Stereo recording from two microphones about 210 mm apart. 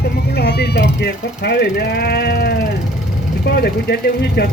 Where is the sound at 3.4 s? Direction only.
50° left (ahead or behind).